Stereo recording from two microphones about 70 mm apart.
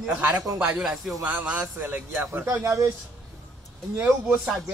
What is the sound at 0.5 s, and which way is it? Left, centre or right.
Speech, centre.